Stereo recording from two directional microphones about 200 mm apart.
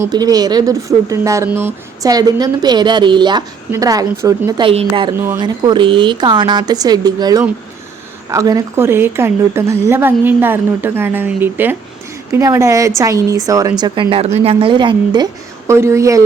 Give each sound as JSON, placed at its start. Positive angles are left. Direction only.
{"t": 0.0, "sound": "a woman's voice", "side_deg": -20}